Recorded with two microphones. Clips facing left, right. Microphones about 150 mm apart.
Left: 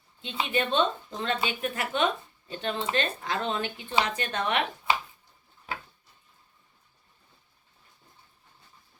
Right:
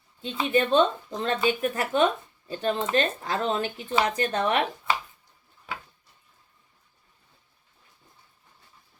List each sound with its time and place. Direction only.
0.2 s speech: 40° right (ahead or behind)